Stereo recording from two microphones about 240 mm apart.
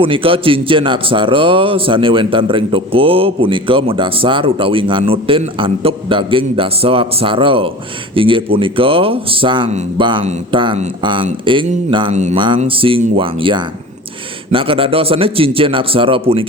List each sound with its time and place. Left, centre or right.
0.0 s a man's voice: right